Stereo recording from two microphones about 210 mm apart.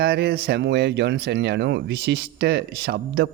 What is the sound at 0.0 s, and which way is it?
Speech, 50° right (ahead or behind).